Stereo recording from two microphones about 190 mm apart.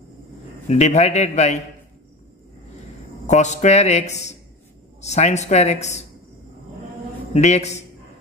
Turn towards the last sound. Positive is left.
turn(degrees=35)  # may be behind; listen again after turning